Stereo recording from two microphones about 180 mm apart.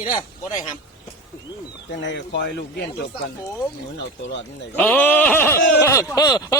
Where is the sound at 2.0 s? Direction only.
80° left.